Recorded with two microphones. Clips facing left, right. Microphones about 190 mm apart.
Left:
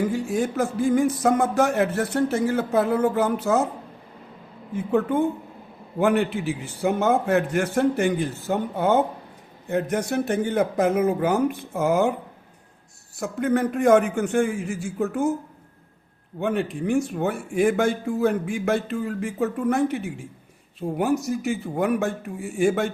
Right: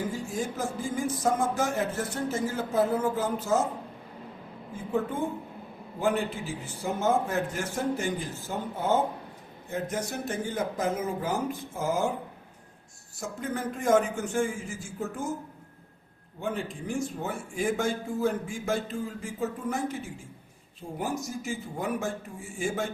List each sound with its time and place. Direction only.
0.1 s a man's voice: 65° left (ahead or behind)
4.7 s a man's voice: 65° left (ahead or behind)
13.1 s speech: 65° left (ahead or behind)
16.4 s a man's voice: 65° left (ahead or behind)